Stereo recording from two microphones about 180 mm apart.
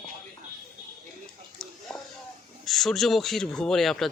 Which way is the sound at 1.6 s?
5° left (ahead or behind).